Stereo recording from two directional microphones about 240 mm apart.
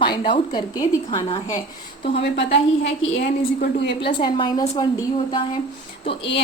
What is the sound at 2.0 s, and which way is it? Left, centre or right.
Speech, left.